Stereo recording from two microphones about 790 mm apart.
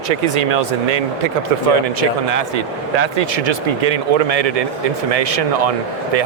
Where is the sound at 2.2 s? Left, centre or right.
Right.